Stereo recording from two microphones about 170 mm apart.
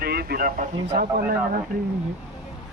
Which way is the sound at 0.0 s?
65° right (ahead or behind).